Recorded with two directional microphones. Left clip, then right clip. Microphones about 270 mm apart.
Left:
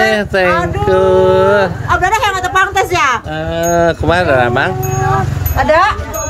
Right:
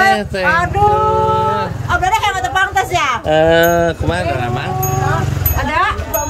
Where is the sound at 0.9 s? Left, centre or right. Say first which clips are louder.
Left 4 dB; centre.